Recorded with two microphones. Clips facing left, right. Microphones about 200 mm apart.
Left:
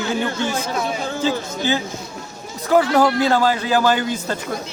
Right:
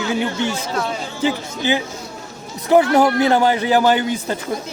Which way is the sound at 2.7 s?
20° right (ahead or behind).